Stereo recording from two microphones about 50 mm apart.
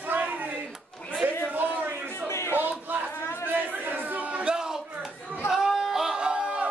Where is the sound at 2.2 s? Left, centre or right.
Left.